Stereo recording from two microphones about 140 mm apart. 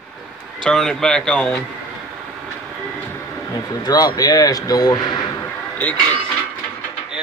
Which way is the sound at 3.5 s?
25° left (ahead or behind).